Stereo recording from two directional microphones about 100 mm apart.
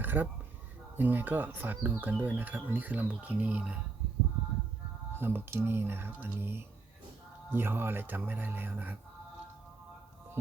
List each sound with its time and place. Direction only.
0.0 s a sound: 20° right (ahead or behind)
0.9 s speech: 20° right (ahead or behind)
5.1 s speech: 20° right (ahead or behind)